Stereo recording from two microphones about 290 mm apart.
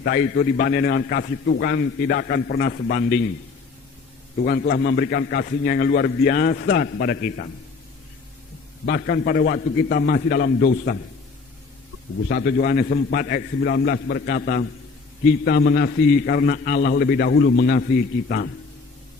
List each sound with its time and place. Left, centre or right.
0.0 s a man's voice: left
4.4 s a man's voice: left
8.9 s a man's voice: left
12.3 s a man's voice: left